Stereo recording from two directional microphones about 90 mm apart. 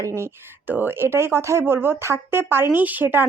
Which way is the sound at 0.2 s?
25° right (ahead or behind).